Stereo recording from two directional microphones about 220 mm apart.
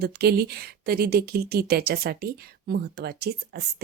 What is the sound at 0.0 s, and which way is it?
A woman's voice, 45° right (ahead or behind).